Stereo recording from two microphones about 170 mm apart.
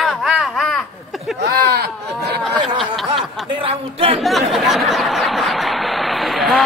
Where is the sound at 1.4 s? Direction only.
75° right (ahead or behind).